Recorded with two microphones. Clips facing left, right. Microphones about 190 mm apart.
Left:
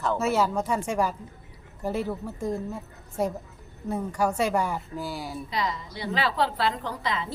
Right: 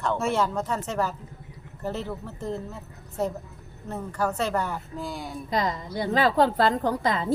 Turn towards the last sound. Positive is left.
turn(degrees=-45)  # may be behind; listen again after turning